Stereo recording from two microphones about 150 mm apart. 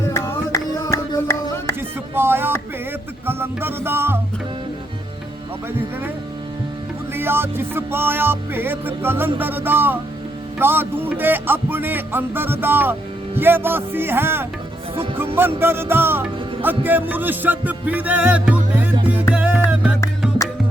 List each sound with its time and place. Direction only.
0.0 s a sound: 20° left (ahead or behind)
2.1 s music: 15° right (ahead or behind)
7.1 s music: 15° right (ahead or behind)